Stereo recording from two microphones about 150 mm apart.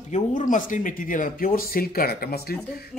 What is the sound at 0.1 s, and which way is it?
Speech, 55° left (ahead or behind).